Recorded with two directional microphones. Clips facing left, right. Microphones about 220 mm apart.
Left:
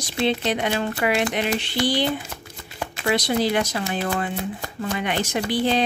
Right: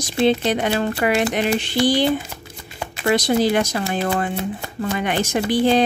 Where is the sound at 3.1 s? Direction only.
45° right (ahead or behind).